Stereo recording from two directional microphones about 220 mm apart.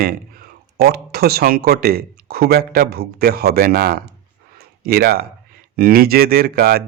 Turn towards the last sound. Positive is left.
turn(degrees=-45)  # may be behind; listen again after turning